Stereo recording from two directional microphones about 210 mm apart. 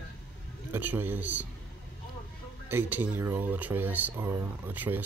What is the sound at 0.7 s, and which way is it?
Speech, 10° right (ahead or behind).